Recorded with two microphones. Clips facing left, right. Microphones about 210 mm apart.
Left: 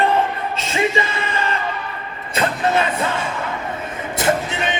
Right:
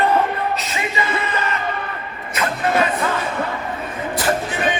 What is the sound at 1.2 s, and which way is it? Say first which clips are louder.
Music: left 1 dB; 30° left (ahead or behind).